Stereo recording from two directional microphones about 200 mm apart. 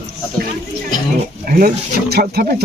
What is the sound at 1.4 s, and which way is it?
Speech, 45° right (ahead or behind).